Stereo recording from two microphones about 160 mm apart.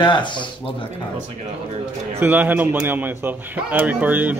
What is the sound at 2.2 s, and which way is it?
A man's voice, 10° right (ahead or behind).